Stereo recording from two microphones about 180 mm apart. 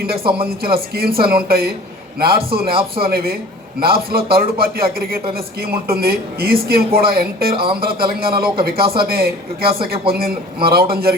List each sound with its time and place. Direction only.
0.4 s speech: 55° right (ahead or behind)
7.5 s speech: 30° right (ahead or behind)
8.2 s speech: 55° right (ahead or behind)